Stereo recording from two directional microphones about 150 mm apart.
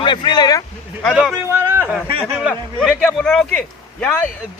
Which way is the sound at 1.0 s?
5° right (ahead or behind).